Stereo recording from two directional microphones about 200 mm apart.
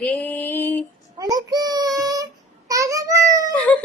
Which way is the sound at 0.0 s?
10° left (ahead or behind).